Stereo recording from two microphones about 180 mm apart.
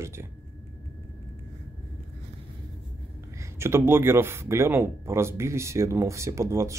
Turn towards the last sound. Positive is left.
turn(degrees=-15)  # may be behind; listen again after turning